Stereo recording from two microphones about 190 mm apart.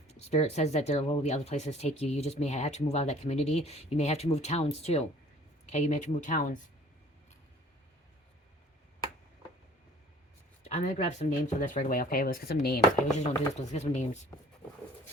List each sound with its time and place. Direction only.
0.1 s speech: 35° left (ahead or behind)
10.8 s speech: 35° left (ahead or behind)